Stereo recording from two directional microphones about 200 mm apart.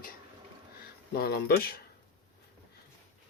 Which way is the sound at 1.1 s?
50° left (ahead or behind).